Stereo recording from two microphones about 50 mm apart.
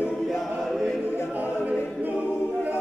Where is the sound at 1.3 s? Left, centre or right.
Right.